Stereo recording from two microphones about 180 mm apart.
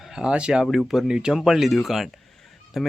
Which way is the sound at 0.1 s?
5° right (ahead or behind).